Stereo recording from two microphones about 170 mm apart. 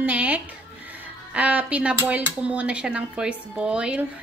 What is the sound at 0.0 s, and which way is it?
Music, 10° right (ahead or behind).